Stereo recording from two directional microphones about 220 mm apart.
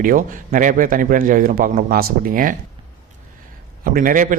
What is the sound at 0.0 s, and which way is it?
A man's voice, 40° right (ahead or behind).